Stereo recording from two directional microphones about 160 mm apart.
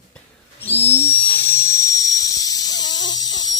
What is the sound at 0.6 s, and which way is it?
Dental drill, 10° left (ahead or behind).